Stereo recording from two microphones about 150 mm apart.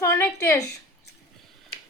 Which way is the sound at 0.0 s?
20° left (ahead or behind).